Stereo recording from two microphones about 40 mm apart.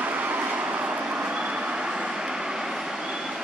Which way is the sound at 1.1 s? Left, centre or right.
Right.